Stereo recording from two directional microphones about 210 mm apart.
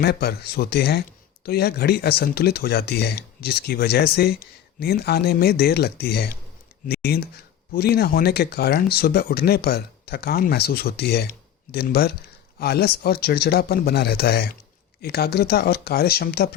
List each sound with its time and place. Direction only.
0.0 s speech: 50° left (ahead or behind)